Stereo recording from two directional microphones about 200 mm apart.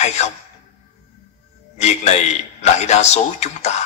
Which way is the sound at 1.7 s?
35° left (ahead or behind).